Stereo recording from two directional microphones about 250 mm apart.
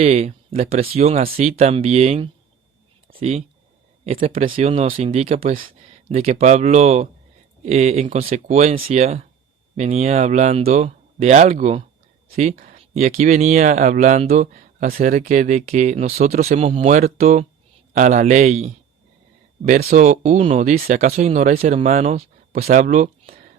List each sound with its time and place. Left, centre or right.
0.0 s speech: right